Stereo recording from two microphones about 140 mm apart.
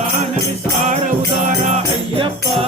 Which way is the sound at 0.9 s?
65° right (ahead or behind).